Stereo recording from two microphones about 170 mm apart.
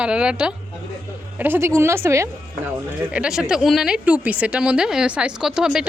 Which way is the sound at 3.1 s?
5° right (ahead or behind).